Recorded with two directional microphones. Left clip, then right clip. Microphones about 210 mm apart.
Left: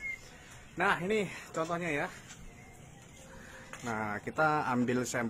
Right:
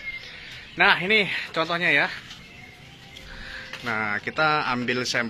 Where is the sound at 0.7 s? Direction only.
10° right (ahead or behind).